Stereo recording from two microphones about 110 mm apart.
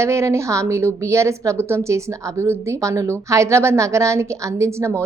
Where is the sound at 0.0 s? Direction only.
25° right (ahead or behind).